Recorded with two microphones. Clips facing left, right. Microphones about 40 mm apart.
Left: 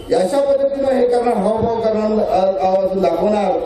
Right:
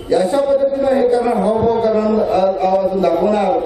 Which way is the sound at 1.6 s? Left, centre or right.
Right.